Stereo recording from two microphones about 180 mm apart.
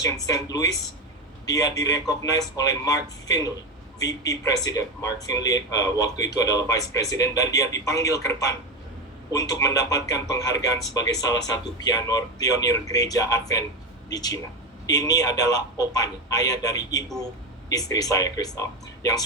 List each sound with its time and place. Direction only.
0.3 s speech: 20° left (ahead or behind)